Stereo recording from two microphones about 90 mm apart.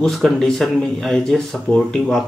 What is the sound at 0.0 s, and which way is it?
Speech, 5° left (ahead or behind).